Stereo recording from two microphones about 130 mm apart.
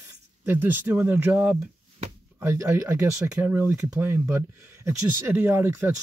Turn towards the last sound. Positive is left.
turn(degrees=-15)  # may be behind; listen again after turning